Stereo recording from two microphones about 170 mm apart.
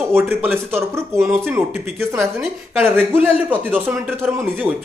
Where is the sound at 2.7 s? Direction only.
10° right (ahead or behind).